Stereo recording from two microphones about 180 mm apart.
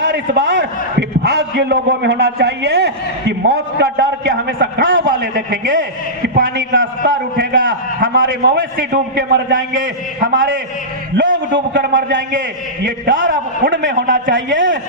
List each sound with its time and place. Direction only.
0.0 s a man's voice: 80° right
5.3 s a man's voice: 55° right (ahead or behind)
6.2 s a man's voice: 65° right (ahead or behind); by 6.8 s 90° right
7.0 s a man's voice: 55° right (ahead or behind)
7.6 s a man's voice: 90° right
11.1 s a man's voice: 90° right
13.1 s a man's voice: 50° right (ahead or behind)
14.3 s a man's voice: 90° right